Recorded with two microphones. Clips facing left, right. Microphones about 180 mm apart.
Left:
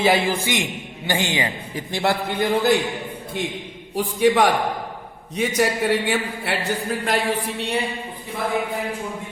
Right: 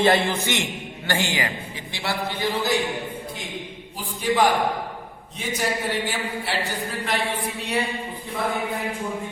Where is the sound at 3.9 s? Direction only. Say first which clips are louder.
Left 5 dB; 70° left (ahead or behind).